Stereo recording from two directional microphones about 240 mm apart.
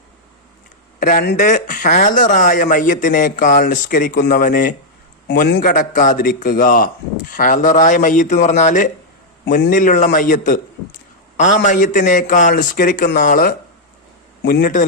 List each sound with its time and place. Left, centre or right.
0.9 s speech: left